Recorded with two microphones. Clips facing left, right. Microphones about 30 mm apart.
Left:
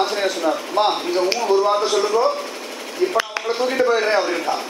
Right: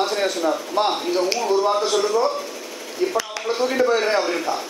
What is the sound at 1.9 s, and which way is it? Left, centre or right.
Speech, left.